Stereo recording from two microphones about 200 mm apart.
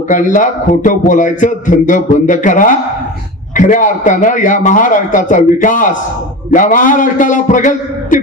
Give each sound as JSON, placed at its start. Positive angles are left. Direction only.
{"t": 0.1, "sound": "a man's voice", "side_deg": 40}